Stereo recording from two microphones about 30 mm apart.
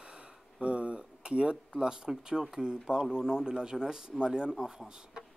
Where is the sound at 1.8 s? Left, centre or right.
Right.